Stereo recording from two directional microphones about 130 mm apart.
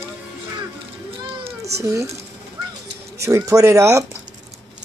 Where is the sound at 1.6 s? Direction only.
25° right (ahead or behind).